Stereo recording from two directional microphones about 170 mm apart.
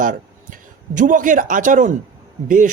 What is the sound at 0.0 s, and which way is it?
A man's voice, 50° right (ahead or behind).